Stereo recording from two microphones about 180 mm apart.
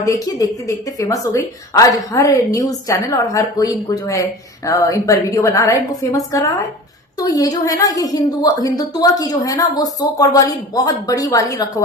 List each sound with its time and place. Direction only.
0.0 s a woman's voice: 20° left (ahead or behind)